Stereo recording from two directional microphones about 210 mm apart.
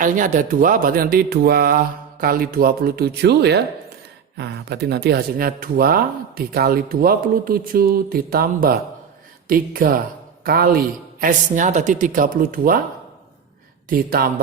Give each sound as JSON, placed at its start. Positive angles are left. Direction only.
{"t": 0.0, "sound": "speech", "side_deg": -40}
{"t": 13.9, "sound": "speech", "side_deg": -45}